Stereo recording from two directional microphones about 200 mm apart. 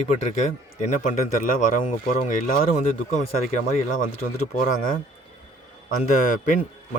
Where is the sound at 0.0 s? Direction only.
35° left (ahead or behind).